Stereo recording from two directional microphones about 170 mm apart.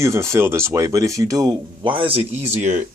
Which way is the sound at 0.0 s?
15° right (ahead or behind).